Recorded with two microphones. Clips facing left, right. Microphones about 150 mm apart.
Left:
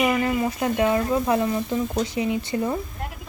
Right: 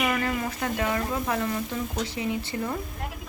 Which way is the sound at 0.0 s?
20° left (ahead or behind).